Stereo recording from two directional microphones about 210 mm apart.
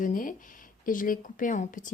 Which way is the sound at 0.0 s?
40° left (ahead or behind).